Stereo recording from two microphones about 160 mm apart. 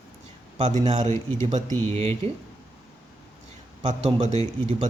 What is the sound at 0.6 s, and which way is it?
Speech, 45° right (ahead or behind).